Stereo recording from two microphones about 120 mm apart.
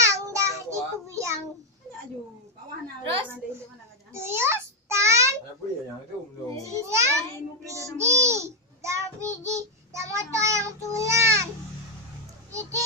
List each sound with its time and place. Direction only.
0.0 s child singing: 25° right (ahead or behind)
4.1 s a child's voice: 20° right (ahead or behind)
6.6 s child singing: 25° right (ahead or behind)
8.3 s a child's voice: 25° right (ahead or behind)
9.4 s child singing: 25° right (ahead or behind)
12.4 s a child's voice: 25° right (ahead or behind)